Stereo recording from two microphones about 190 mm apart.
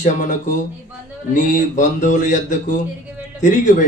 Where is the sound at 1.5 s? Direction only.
40° left (ahead or behind).